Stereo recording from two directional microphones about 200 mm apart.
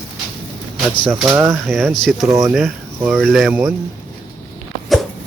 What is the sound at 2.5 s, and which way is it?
Speech, 5° right (ahead or behind).